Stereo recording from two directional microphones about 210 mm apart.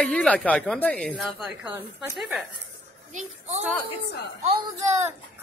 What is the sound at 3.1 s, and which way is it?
Speech, 35° right (ahead or behind).